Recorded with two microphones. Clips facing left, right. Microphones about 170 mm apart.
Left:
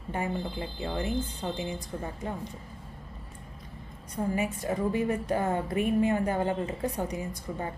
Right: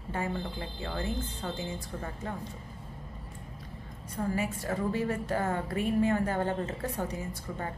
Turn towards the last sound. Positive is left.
turn(degrees=15)  # may be behind; listen again after turning